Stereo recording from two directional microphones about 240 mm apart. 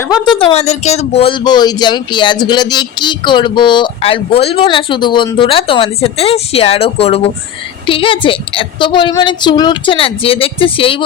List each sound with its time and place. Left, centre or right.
0.3 s speech: left